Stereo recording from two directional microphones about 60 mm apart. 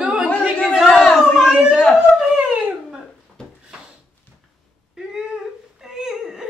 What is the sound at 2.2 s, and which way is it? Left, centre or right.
Dog, centre.